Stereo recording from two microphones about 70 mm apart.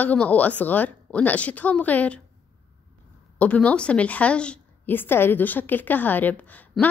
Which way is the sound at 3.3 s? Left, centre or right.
Centre.